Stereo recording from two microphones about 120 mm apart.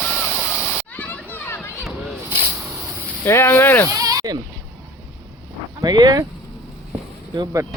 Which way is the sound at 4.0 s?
30° right (ahead or behind).